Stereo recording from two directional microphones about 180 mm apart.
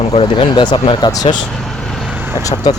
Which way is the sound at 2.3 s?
20° left (ahead or behind).